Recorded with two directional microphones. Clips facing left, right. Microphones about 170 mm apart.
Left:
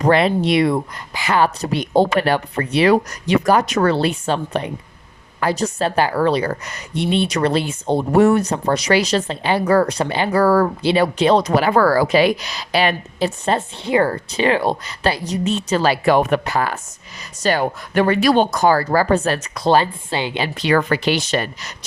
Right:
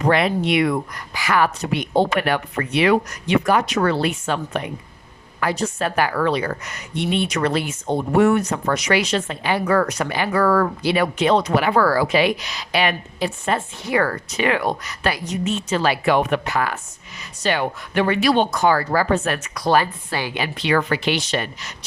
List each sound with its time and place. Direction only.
0.0 s a woman's voice: 30° left (ahead or behind)
3.9 s a woman's voice: 30° left (ahead or behind)
19.5 s a woman's voice: 25° left (ahead or behind)
20.6 s speech: 40° left (ahead or behind)